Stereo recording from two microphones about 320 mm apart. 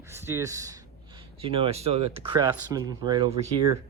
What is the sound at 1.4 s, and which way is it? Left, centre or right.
Speech, centre.